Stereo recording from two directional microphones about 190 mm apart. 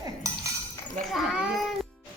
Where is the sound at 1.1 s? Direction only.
Centre (ahead or behind).